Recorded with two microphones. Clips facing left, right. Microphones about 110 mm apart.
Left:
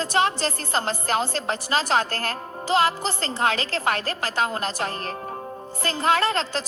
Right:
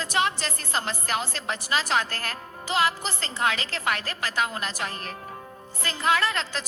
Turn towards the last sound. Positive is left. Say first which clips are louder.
# left 3 dB
turn(degrees=35)  # may be behind; listen again after turning